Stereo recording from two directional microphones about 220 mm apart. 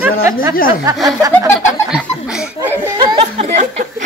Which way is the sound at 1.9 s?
5° right (ahead or behind).